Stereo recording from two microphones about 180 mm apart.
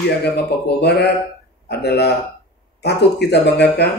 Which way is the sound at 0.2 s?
65° left (ahead or behind).